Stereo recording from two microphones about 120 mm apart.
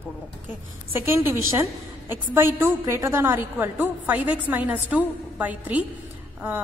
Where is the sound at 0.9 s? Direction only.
20° right (ahead or behind).